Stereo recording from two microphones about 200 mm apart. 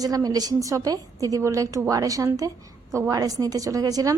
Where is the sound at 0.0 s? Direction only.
20° right (ahead or behind).